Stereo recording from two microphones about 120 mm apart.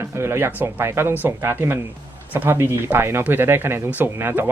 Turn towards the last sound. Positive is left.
turn(degrees=-20)  # may be behind; listen again after turning